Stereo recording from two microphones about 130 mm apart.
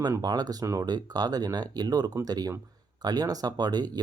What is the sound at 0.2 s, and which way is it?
Speech, 30° right (ahead or behind).